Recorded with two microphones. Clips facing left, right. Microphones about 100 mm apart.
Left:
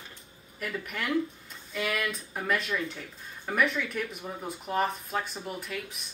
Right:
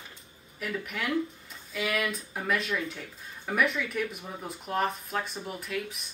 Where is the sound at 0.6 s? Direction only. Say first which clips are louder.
Right 1 dB; centre (ahead or behind).